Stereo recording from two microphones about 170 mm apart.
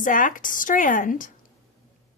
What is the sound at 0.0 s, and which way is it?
A woman's voice, 50° left (ahead or behind).